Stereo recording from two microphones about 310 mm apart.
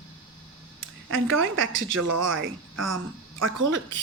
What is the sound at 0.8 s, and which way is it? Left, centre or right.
A woman's voice, right.